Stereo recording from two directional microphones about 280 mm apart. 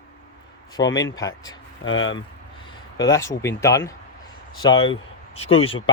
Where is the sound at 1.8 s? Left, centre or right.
Left.